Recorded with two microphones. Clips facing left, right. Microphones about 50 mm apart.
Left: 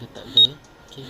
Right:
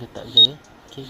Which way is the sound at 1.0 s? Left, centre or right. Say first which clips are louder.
Right 3 dB; right.